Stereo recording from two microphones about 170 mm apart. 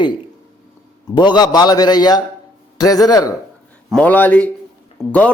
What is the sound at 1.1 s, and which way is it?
A man's voice, 25° left (ahead or behind).